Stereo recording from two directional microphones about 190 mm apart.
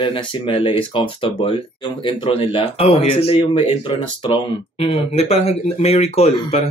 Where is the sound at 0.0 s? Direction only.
25° left (ahead or behind).